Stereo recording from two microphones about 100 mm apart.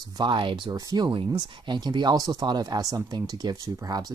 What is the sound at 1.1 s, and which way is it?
Speech, 50° right (ahead or behind).